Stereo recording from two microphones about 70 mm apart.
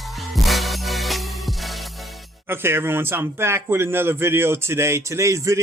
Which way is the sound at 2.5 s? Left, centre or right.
Right.